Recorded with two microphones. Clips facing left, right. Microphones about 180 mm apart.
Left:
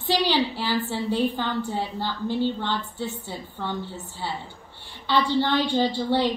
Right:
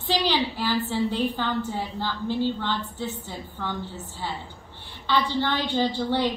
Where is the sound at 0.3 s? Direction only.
15° left (ahead or behind).